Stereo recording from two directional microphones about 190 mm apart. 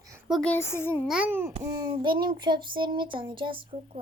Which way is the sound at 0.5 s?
15° left (ahead or behind).